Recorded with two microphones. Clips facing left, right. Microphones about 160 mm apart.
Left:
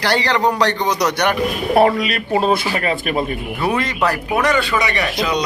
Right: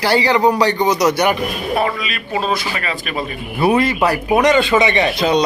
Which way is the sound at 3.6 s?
10° right (ahead or behind).